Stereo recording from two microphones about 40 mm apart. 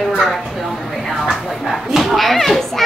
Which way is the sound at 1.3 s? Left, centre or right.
Centre.